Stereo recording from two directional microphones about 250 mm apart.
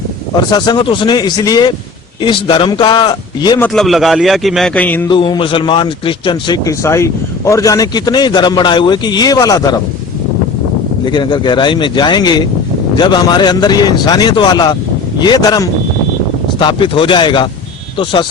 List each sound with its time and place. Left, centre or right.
0.5 s a man's voice: centre
3.7 s a man's voice: centre
11.0 s a man's voice: centre